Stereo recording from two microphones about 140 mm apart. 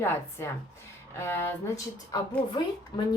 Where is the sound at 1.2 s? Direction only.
15° left (ahead or behind).